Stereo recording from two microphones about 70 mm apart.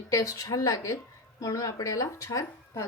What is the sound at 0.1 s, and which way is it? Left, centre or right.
Speech, left.